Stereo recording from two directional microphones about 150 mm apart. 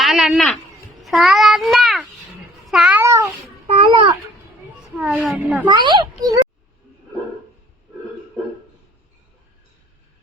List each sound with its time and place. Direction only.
0.0 s speech: centre (ahead or behind)
1.0 s child singing: centre (ahead or behind)
2.6 s cat: 5° right (ahead or behind)
3.0 s cat: 20° right (ahead or behind)
3.7 s babbling: 35° right (ahead or behind)
4.9 s a woman's voice: 10° right (ahead or behind)
5.6 s speech: 30° right (ahead or behind)